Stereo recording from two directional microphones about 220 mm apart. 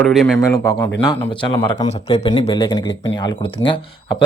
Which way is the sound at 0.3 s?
15° left (ahead or behind).